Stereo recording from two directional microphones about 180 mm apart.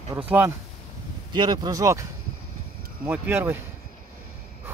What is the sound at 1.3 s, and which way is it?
Speech, 25° right (ahead or behind).